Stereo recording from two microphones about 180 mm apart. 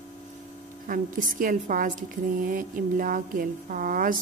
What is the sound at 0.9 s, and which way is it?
Speech, 50° right (ahead or behind).